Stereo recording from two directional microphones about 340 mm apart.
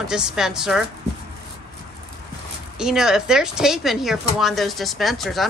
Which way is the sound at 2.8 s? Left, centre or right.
Centre.